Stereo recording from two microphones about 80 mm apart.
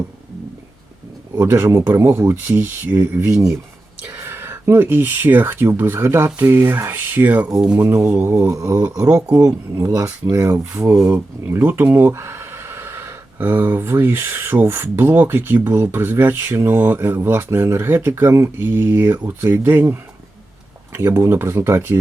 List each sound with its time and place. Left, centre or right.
1.4 s speech: right
8.3 s speech: right
8.5 s speech: right
10.8 s speech: right